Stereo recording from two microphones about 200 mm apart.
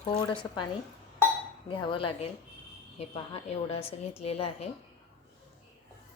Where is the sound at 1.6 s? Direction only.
25° left (ahead or behind).